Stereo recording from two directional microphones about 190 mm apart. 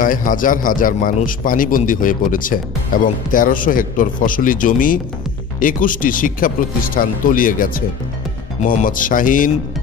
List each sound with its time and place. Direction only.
0.0 s a man's voice: 45° left (ahead or behind)